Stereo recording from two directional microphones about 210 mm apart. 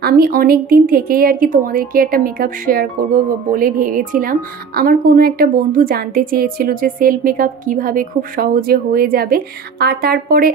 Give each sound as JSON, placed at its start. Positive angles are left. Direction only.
{"t": 0.0, "sound": "speech", "side_deg": -45}